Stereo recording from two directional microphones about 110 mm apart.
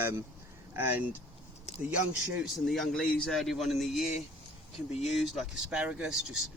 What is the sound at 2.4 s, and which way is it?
Speech, centre (ahead or behind).